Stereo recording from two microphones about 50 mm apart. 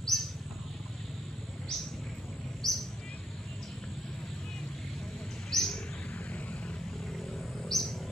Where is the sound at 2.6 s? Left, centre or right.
Centre.